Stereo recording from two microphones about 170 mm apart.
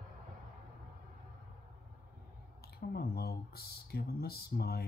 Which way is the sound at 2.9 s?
70° left (ahead or behind).